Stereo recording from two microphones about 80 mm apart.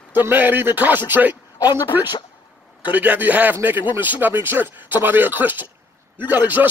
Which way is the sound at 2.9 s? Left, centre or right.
Centre.